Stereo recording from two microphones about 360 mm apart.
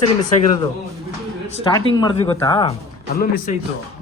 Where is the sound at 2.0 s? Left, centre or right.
Centre.